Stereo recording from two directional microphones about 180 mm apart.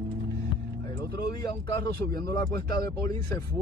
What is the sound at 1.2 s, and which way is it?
Speech, 20° left (ahead or behind).